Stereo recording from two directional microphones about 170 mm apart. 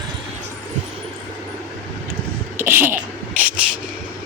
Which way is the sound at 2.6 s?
15° right (ahead or behind).